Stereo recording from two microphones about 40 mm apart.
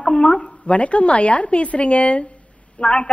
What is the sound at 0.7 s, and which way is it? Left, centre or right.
A man's voice, left.